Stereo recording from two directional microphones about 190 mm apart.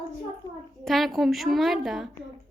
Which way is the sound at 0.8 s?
Centre (ahead or behind).